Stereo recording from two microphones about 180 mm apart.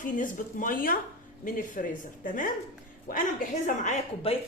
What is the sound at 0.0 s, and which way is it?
Speech, 50° left (ahead or behind).